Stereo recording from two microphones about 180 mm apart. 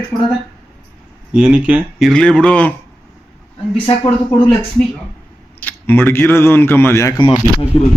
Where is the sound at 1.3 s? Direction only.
5° right (ahead or behind).